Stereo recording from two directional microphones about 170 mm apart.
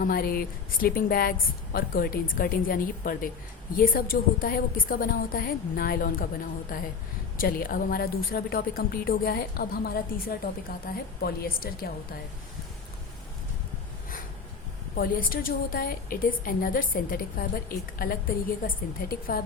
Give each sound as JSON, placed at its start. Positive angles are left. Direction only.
{"t": 0.0, "sound": "a woman's voice", "side_deg": 60}
{"t": 14.9, "sound": "a woman's voice", "side_deg": 60}